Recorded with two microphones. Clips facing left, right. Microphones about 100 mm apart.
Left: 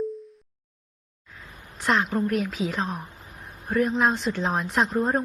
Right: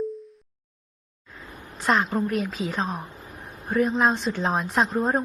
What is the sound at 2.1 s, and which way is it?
A woman's voice, centre (ahead or behind).